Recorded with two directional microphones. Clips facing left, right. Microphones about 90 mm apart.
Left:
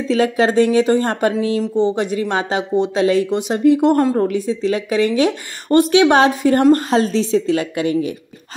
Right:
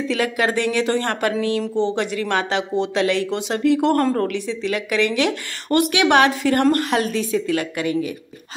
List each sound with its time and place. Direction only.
0.1 s a woman's voice: 25° left (ahead or behind)
1.6 s speech: 5° left (ahead or behind)
2.0 s a woman's voice: 25° left (ahead or behind)
4.6 s a woman's voice: 25° left (ahead or behind)